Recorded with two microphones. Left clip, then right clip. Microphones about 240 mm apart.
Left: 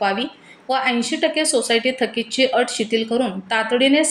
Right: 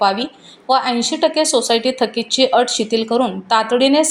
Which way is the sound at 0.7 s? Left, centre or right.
Centre.